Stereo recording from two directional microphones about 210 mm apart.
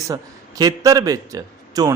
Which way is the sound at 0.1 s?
15° right (ahead or behind).